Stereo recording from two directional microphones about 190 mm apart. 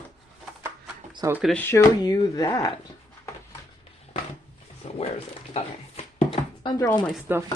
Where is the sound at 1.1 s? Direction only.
20° right (ahead or behind).